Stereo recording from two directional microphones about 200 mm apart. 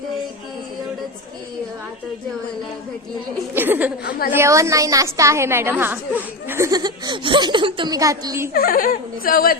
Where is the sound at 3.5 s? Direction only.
10° right (ahead or behind).